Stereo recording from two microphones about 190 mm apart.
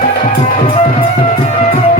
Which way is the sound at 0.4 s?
45° left (ahead or behind).